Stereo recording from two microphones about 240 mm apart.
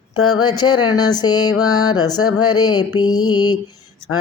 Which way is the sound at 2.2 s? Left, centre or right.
Left.